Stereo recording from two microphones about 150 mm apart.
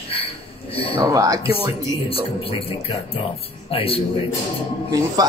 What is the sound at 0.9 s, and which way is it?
Speech, 25° right (ahead or behind).